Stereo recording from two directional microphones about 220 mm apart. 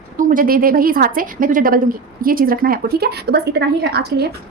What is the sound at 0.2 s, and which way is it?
A woman's voice, 40° right (ahead or behind).